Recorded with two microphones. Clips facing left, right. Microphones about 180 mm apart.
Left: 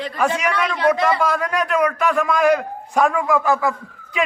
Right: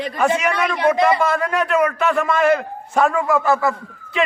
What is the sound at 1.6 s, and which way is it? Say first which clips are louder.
Speech: right 1 dB; 5° right (ahead or behind).